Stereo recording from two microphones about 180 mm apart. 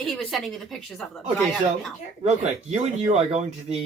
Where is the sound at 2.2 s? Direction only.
40° right (ahead or behind).